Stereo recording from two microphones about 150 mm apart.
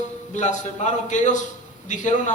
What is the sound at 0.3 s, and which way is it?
A man's voice, 55° left (ahead or behind).